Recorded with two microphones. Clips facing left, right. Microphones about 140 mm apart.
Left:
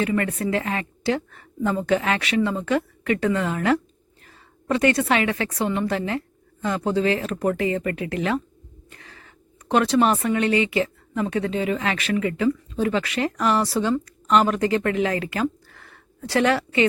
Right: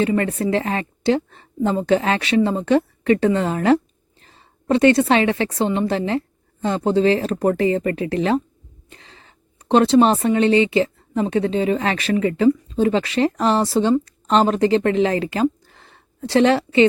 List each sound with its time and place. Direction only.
0.0 s a woman's voice: 30° right (ahead or behind)